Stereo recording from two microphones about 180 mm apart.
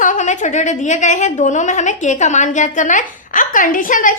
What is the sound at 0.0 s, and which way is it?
A woman's voice, 45° left (ahead or behind).